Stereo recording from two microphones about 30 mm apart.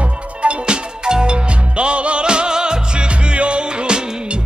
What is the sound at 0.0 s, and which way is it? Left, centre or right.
Music, right.